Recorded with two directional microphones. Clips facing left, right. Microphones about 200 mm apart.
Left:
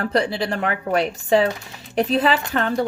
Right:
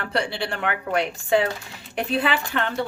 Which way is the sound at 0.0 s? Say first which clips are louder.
Left 5 dB; 40° left (ahead or behind).